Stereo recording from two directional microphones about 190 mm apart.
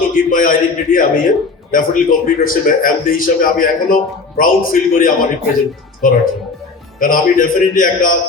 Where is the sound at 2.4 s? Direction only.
45° left (ahead or behind).